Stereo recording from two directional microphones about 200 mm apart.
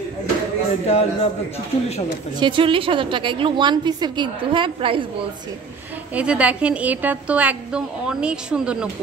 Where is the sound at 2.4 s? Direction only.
25° right (ahead or behind).